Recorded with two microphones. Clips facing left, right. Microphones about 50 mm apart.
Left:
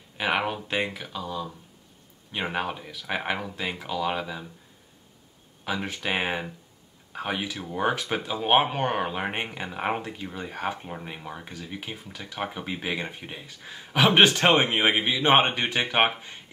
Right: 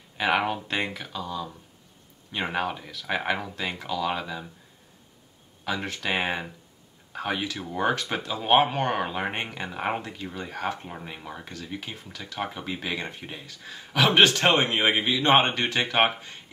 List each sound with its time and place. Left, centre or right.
0.2 s speech: centre
5.6 s speech: centre
14.8 s speech: centre